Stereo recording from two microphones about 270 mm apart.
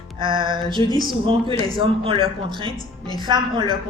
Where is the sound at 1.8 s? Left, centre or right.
Centre.